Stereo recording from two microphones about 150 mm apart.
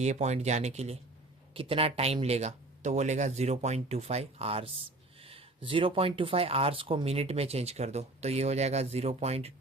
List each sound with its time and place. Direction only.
0.0 s speech: 50° right (ahead or behind)